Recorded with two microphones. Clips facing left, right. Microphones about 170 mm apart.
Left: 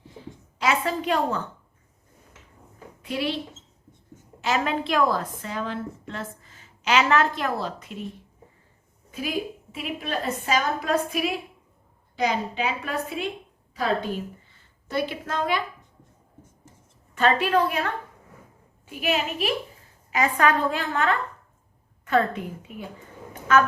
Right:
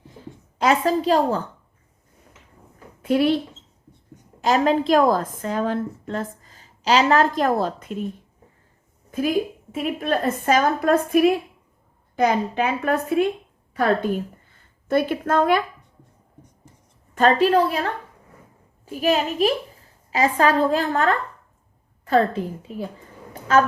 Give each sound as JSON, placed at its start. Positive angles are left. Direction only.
{"t": 0.6, "sound": "a woman's voice", "side_deg": -40}
{"t": 3.0, "sound": "speech", "side_deg": -50}
{"t": 4.4, "sound": "a woman's voice", "side_deg": -40}
{"t": 9.7, "sound": "a woman's voice", "side_deg": -50}
{"t": 17.2, "sound": "a woman's voice", "side_deg": -40}
{"t": 23.3, "sound": "a sound", "side_deg": -30}